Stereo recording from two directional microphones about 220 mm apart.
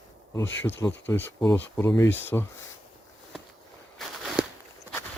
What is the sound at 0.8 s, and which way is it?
Speech, 10° left (ahead or behind).